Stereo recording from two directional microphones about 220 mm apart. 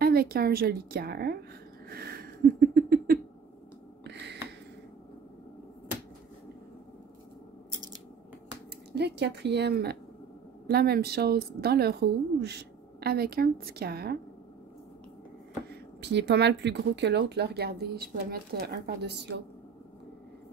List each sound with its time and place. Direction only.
0.0 s speech: 45° right (ahead or behind)
1.9 s a sound: 45° right (ahead or behind)
8.9 s speech: 50° right (ahead or behind)
15.7 s speech: 50° right (ahead or behind)